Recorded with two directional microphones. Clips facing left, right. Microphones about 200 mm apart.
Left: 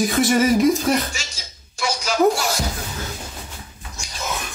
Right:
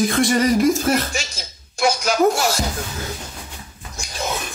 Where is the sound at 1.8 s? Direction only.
50° right (ahead or behind).